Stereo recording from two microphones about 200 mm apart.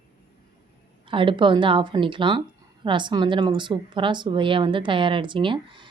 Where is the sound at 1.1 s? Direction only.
25° right (ahead or behind).